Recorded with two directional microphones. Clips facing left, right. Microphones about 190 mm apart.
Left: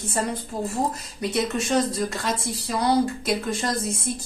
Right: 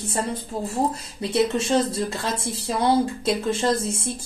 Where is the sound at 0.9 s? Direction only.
30° right (ahead or behind).